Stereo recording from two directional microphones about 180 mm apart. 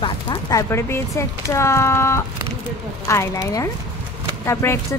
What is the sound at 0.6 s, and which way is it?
Speech, 15° left (ahead or behind).